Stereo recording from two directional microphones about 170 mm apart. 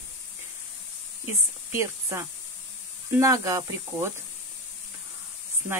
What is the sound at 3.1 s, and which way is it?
Speech, 20° right (ahead or behind).